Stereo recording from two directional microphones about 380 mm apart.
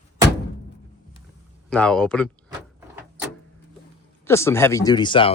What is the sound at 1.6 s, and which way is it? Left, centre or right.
Speech, centre.